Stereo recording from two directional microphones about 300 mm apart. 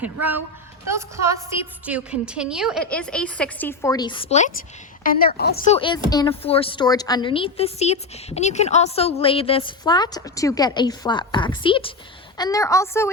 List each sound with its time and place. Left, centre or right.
0.0 s a woman's voice: centre